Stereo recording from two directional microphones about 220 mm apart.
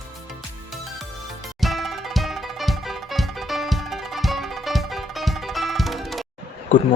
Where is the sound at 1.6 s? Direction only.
Centre (ahead or behind).